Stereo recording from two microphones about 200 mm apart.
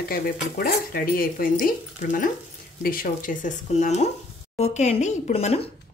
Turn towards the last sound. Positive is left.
turn(degrees=30)  # may be behind; listen again after turning